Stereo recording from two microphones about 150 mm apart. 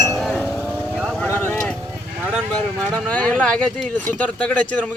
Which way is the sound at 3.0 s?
10° left (ahead or behind).